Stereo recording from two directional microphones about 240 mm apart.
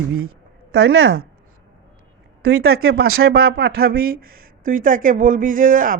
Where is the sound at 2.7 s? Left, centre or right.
Right.